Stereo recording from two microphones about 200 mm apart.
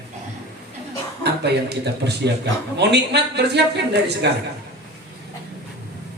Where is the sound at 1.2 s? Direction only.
55° right (ahead or behind).